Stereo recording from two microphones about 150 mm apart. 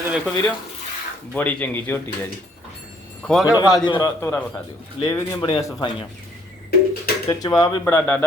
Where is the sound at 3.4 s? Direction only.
10° right (ahead or behind).